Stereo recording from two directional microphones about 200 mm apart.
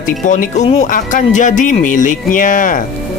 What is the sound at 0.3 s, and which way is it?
Speech, 35° left (ahead or behind).